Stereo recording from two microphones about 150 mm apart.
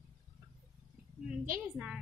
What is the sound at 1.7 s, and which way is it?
Speech, 5° right (ahead or behind).